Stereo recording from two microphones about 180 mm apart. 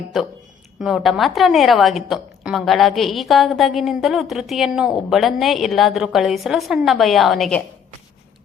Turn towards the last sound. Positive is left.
turn(degrees=0)  # may be behind; listen again after turning